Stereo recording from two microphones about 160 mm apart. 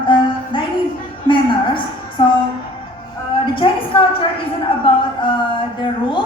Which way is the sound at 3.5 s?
35° left (ahead or behind).